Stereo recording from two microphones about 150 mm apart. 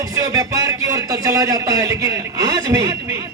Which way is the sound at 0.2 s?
20° right (ahead or behind).